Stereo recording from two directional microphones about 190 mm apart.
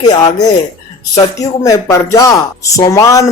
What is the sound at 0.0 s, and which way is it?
A man's voice, 20° left (ahead or behind).